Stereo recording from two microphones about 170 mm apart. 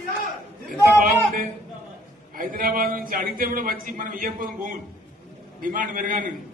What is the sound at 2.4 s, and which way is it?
A man's voice, 55° right (ahead or behind).